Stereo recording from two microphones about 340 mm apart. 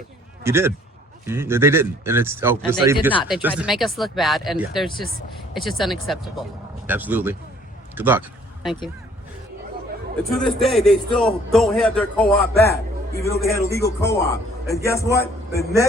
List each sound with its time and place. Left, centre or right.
0.4 s a man's voice: centre
10.3 s a man's voice: centre